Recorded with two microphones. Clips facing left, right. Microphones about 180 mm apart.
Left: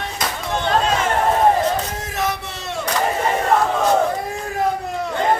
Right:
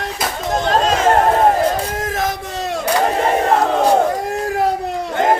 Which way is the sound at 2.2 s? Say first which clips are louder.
Left 2 dB; 45° right (ahead or behind).